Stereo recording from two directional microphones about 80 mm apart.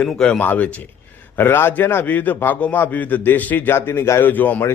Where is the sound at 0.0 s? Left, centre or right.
Centre; by 4.3 s left.